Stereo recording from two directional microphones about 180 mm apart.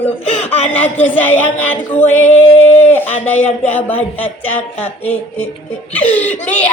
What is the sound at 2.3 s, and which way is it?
Singing, 40° left (ahead or behind).